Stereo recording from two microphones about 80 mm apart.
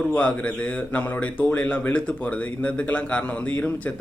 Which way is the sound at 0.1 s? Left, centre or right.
Centre.